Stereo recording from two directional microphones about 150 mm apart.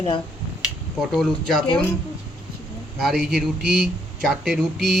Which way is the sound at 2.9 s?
5° right (ahead or behind).